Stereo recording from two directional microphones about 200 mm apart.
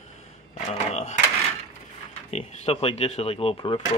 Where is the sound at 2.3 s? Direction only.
30° left (ahead or behind).